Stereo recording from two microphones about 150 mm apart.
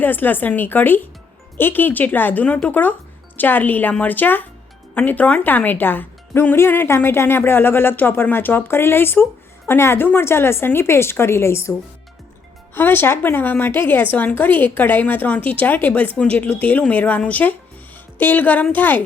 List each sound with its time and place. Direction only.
0.0 s a woman's voice: 10° left (ahead or behind)